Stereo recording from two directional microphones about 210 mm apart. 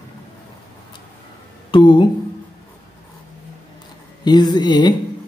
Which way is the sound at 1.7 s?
20° left (ahead or behind).